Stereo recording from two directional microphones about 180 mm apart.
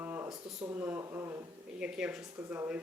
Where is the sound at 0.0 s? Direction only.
10° right (ahead or behind).